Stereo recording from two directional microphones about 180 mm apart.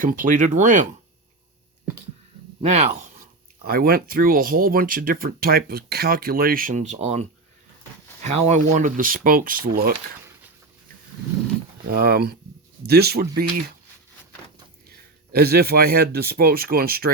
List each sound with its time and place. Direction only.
0.0 s speech: 45° right (ahead or behind)
2.6 s speech: 40° right (ahead or behind)
11.9 s speech: 60° right (ahead or behind)
14.8 s speech: 60° right (ahead or behind)